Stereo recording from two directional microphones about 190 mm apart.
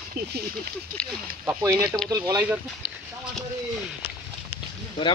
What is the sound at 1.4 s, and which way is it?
Speech, 15° right (ahead or behind).